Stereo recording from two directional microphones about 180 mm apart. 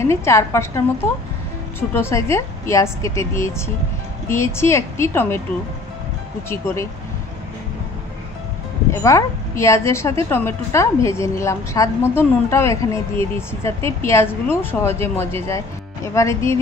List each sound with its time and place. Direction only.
0.0 s a woman's voice: 15° left (ahead or behind)
6.5 s a woman's voice: 15° left (ahead or behind)
9.0 s a woman's voice: 15° left (ahead or behind)